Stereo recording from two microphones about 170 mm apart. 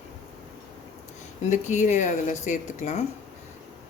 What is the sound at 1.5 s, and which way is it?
Speech, 45° left (ahead or behind).